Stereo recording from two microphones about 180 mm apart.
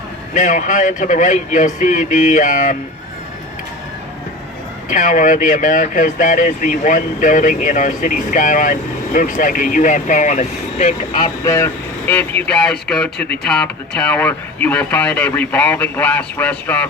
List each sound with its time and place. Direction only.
0.3 s speech: 45° left (ahead or behind)
4.9 s speech: 45° left (ahead or behind)
11.4 s speech: 15° left (ahead or behind)
13.1 s speech: 65° left (ahead or behind)
13.4 s speech: 5° left (ahead or behind)